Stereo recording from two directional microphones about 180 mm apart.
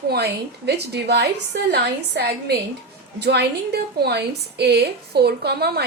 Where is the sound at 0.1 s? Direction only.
65° right (ahead or behind).